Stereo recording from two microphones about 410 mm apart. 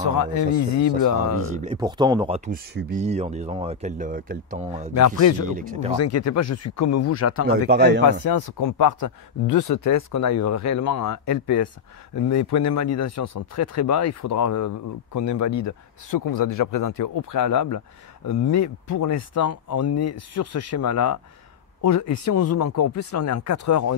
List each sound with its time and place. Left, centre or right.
0.2 s speech: left
1.5 s speech: centre
4.9 s speech: left
5.5 s a man's voice: centre
5.9 s speech: left
7.4 s a man's voice: right
8.1 s speech: left